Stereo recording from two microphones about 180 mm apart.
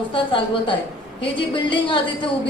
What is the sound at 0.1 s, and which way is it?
Speech, 30° left (ahead or behind).